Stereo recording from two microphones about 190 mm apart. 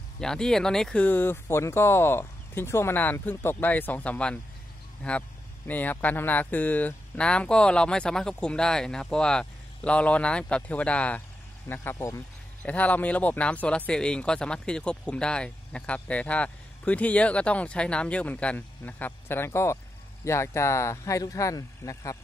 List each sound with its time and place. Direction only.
0.2 s speech: 5° left (ahead or behind)